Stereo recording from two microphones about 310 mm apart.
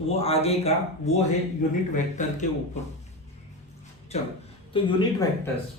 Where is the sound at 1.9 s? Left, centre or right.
Left.